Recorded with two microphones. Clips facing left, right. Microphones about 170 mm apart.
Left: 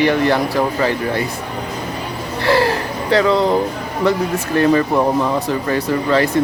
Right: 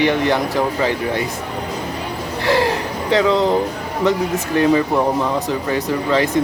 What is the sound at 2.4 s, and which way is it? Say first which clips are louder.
Speech: left 2 dB; 15° right (ahead or behind).